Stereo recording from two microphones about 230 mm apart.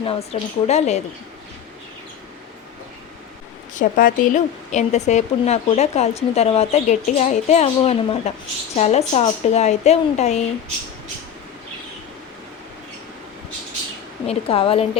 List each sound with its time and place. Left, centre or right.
0.0 s a woman's voice: left
3.8 s a woman's voice: left
14.3 s a woman's voice: left